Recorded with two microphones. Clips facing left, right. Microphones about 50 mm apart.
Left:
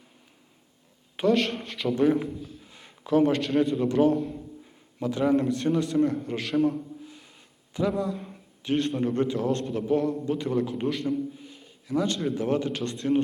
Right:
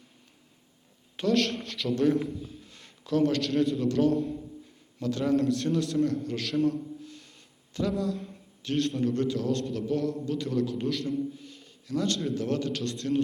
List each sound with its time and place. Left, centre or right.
1.1 s a man's voice: centre
9.5 s a man's voice: centre
9.7 s a man's voice: left